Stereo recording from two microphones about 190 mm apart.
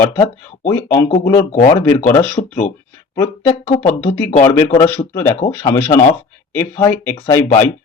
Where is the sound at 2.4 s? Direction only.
35° left (ahead or behind).